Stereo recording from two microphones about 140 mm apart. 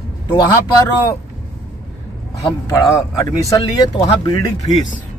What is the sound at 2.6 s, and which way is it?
Speech, 20° left (ahead or behind).